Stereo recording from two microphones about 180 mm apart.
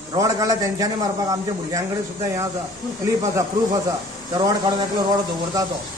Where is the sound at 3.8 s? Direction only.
20° right (ahead or behind).